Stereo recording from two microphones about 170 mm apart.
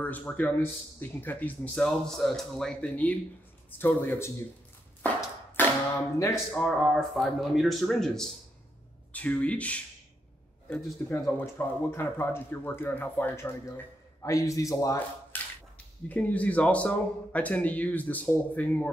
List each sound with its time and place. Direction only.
0.0 s a man's voice: 10° left (ahead or behind)
5.6 s tap: 10° left (ahead or behind)
6.1 s speech: 20° left (ahead or behind)
6.5 s speech: 5° left (ahead or behind)
15.3 s bathtub: 10° left (ahead or behind)
16.1 s speech: 10° left (ahead or behind)